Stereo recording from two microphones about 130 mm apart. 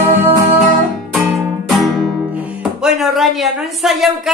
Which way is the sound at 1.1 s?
Centre (ahead or behind).